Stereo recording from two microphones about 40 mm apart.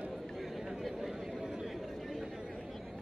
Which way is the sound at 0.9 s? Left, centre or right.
Centre.